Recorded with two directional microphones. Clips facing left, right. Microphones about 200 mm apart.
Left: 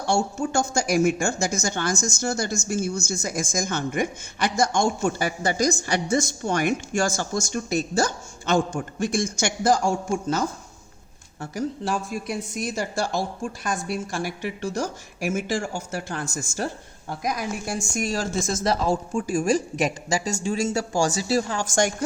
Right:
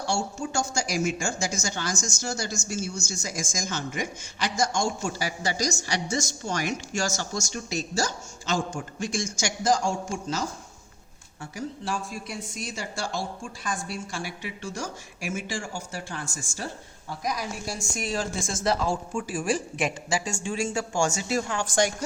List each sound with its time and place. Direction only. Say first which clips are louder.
0.0 s a woman's voice: left 5 dB; 55° left (ahead or behind); by 16.6 s 40° left (ahead or behind)
17.1 s a woman's voice: left 3 dB; 55° left (ahead or behind)